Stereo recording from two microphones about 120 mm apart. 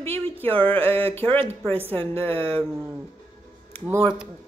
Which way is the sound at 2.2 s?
55° right (ahead or behind).